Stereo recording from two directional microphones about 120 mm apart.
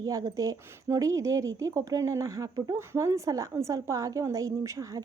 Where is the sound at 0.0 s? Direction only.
30° right (ahead or behind).